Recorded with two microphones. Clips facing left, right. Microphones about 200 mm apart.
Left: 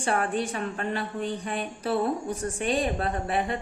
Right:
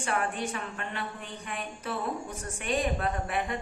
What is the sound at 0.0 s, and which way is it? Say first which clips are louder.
A woman's voice: left 4 dB; 35° left (ahead or behind).